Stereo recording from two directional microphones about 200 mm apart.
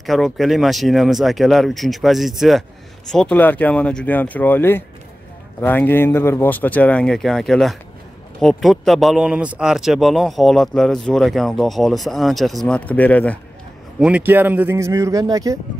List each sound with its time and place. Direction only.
0.0 s speech: centre (ahead or behind)
13.9 s a man's voice: 5° right (ahead or behind)